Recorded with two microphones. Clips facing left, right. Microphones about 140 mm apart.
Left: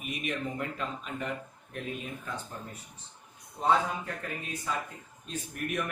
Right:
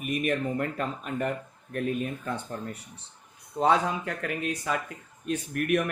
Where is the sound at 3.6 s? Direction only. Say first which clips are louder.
Right 3 dB; 85° right.